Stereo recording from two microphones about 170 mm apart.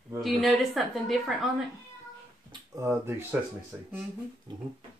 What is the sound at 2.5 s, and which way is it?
Speech, 20° right (ahead or behind).